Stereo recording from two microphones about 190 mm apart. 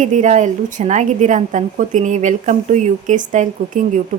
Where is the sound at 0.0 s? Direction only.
40° right (ahead or behind).